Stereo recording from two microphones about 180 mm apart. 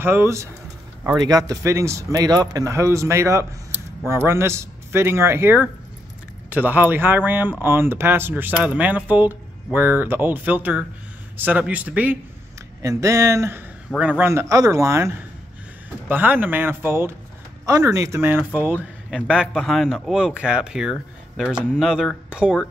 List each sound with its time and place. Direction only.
0.0 s speech: 15° right (ahead or behind)